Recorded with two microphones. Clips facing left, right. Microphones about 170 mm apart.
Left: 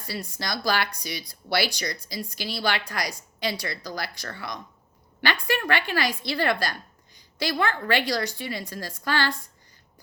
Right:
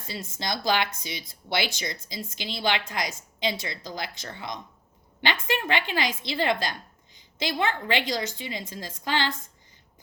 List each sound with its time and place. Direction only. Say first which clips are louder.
0.0 s speech: left 1 dB; 20° right (ahead or behind)